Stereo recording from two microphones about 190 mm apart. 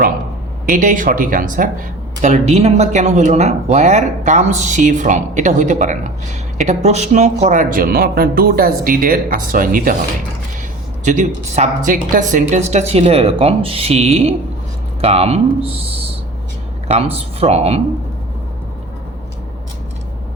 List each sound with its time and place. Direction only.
0.6 s speech: 45° right (ahead or behind)
11.0 s speech: 40° right (ahead or behind)